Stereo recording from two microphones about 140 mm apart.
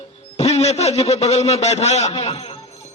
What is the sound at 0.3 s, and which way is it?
A man's voice, 50° left (ahead or behind).